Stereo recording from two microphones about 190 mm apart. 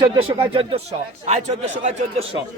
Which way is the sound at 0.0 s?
30° right (ahead or behind).